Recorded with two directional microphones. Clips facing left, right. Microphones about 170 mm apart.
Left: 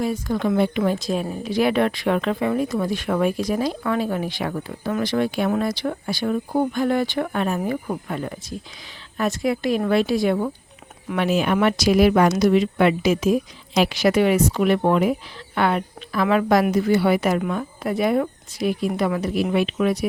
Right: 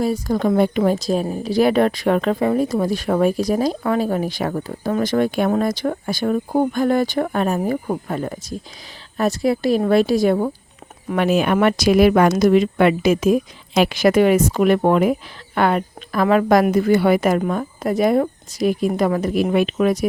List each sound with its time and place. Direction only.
0.0 s a woman's voice: 40° right (ahead or behind)
11.1 s speech: 50° right (ahead or behind)